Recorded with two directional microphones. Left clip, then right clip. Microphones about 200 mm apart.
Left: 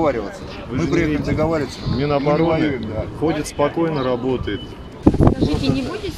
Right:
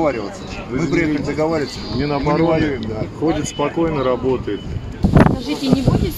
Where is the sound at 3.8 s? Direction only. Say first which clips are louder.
Right 2 dB; 40° left (ahead or behind).